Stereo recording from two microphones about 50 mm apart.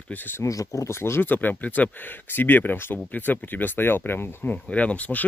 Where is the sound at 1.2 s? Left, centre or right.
Left.